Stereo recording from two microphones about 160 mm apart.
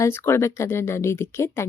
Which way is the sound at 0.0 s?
15° left (ahead or behind).